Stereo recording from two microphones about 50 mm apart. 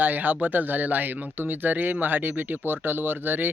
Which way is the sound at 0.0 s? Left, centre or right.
Right.